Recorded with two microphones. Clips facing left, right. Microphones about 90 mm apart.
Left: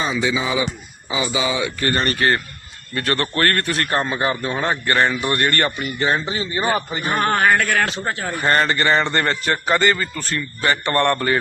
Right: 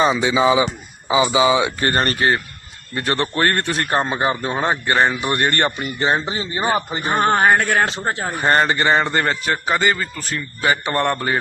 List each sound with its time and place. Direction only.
0.0 s a man's voice: 25° right (ahead or behind)